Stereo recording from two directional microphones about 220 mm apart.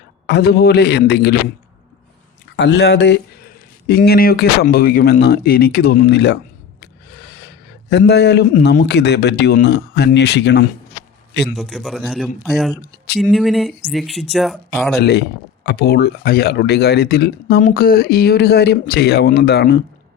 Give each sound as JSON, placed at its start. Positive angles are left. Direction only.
{"t": 0.3, "sound": "speech", "side_deg": 50}
{"t": 2.6, "sound": "a man's voice", "side_deg": 50}
{"t": 11.5, "sound": "speech", "side_deg": 0}
{"t": 14.9, "sound": "speech", "side_deg": 45}